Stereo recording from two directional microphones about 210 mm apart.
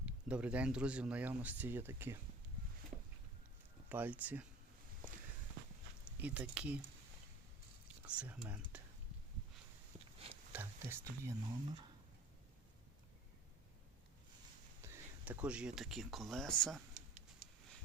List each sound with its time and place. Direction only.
0.0 s speech: 5° right (ahead or behind)
3.8 s speech: 10° right (ahead or behind)
6.1 s speech: 5° right (ahead or behind)
8.0 s speech: 5° right (ahead or behind)
10.5 s speech: 10° right (ahead or behind)
14.8 s speech: 5° right (ahead or behind)
17.4 s a sound: 40° right (ahead or behind)